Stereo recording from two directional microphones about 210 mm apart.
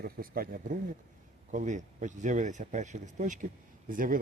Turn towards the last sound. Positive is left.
turn(degrees=-40)  # may be behind; listen again after turning